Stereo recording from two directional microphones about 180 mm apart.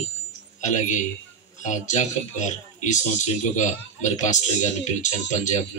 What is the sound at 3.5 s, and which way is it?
Speech, 40° left (ahead or behind).